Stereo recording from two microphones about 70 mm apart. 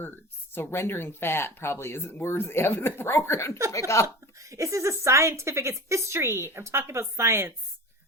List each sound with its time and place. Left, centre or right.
0.5 s speech: left
4.0 s speech: right